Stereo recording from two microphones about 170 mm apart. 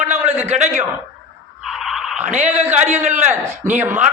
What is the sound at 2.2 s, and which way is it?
A man's voice, 40° right (ahead or behind).